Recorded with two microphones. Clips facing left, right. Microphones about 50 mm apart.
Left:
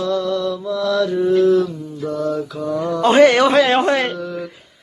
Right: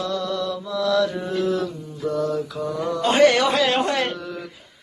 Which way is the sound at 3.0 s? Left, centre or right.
Left.